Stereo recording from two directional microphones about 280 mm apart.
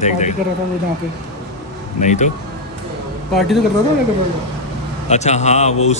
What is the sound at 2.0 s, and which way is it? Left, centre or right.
Speech, left.